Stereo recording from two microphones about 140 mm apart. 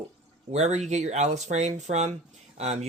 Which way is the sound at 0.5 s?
55° right (ahead or behind).